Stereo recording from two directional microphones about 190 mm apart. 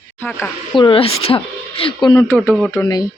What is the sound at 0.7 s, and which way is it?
A woman's voice, 25° left (ahead or behind).